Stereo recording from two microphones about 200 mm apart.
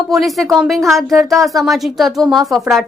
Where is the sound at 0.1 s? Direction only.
Centre (ahead or behind).